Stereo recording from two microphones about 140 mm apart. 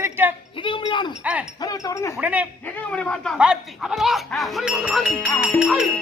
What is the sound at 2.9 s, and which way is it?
Speech, 10° left (ahead or behind).